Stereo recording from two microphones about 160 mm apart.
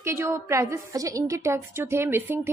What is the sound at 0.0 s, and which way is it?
A woman's voice, 15° right (ahead or behind).